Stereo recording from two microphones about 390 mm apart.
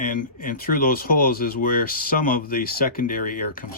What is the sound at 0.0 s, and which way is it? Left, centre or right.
Speech, left.